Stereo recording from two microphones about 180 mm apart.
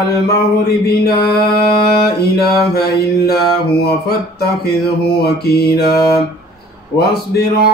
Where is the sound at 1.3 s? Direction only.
60° left (ahead or behind).